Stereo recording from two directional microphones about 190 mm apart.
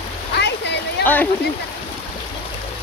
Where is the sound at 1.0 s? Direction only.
10° left (ahead or behind).